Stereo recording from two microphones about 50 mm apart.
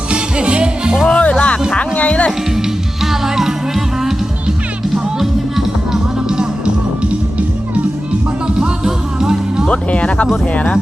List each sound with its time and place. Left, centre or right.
0.1 s music: right
1.0 s music: centre
3.0 s music: centre
8.4 s music: centre
9.6 s speech: left